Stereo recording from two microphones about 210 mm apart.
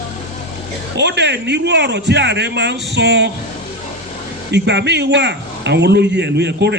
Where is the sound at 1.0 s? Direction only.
55° right (ahead or behind).